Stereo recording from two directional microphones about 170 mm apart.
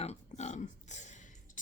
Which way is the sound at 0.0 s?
40° left (ahead or behind).